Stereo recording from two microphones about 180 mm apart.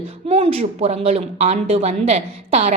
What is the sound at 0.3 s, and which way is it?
Speech, 35° right (ahead or behind).